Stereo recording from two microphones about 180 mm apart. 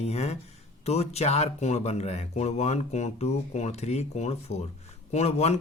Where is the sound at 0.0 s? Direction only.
35° left (ahead or behind).